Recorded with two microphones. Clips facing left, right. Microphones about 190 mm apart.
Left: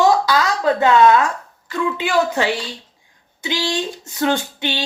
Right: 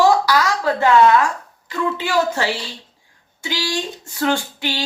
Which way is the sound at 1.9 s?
15° left (ahead or behind).